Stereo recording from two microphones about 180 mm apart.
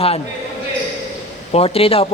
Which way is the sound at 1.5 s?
35° left (ahead or behind).